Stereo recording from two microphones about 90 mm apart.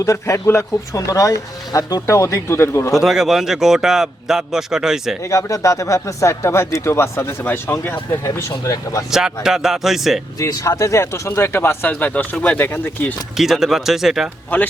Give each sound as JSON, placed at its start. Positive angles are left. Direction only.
{"t": 0.0, "sound": "speech", "side_deg": 35}
{"t": 2.9, "sound": "a man's voice", "side_deg": -5}
{"t": 5.2, "sound": "speech", "side_deg": 35}
{"t": 9.0, "sound": "a man's voice", "side_deg": -5}
{"t": 10.3, "sound": "speech", "side_deg": 40}
{"t": 13.3, "sound": "a man's voice", "side_deg": -5}